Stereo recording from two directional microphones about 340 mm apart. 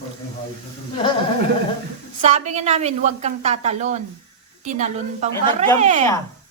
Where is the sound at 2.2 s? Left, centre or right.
Centre.